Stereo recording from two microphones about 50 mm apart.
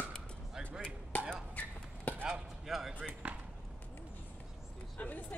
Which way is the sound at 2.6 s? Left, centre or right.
Centre.